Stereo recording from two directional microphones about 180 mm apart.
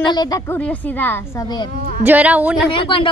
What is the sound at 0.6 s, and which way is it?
A woman's voice, 10° left (ahead or behind).